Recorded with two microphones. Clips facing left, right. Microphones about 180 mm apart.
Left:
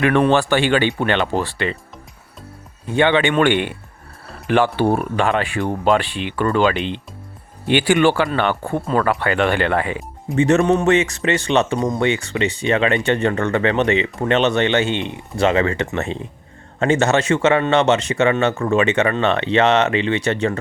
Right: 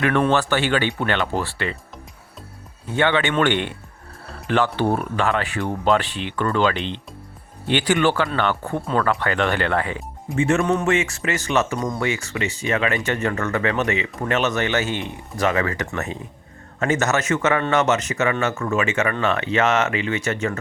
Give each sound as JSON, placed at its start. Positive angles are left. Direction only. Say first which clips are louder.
{"t": 0.0, "sound": "speech", "louder": "left 4 dB", "side_deg": 20}
{"t": 2.8, "sound": "speech", "louder": "left 4 dB", "side_deg": 15}
{"t": 10.3, "sound": "speech", "louder": "left 4 dB", "side_deg": 35}